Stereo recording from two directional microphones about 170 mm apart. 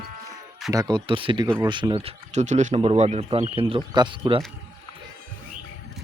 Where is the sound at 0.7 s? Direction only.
25° right (ahead or behind).